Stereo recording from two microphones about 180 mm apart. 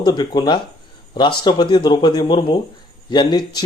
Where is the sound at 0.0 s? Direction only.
25° left (ahead or behind).